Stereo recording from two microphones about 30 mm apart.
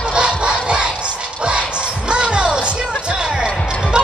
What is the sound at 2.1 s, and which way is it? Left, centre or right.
Music, right.